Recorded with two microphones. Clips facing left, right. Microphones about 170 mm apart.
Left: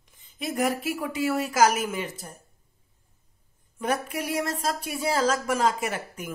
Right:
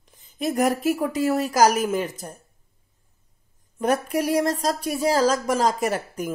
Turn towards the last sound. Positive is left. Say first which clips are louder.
# right 6 dB
turn(degrees=-40)  # may be behind; listen again after turning